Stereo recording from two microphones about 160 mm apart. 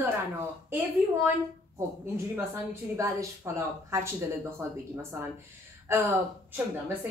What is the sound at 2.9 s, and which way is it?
A woman's voice, 20° right (ahead or behind).